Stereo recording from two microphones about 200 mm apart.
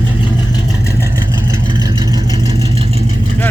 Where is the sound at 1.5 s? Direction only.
20° right (ahead or behind).